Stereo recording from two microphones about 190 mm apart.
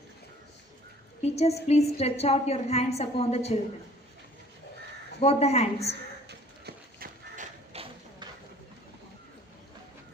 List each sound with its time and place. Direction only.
1.2 s a woman's voice: 35° left (ahead or behind)
5.2 s a woman's voice: 35° left (ahead or behind)
6.2 s clip-clop: 60° right (ahead or behind)
7.3 s a sound: 30° right (ahead or behind)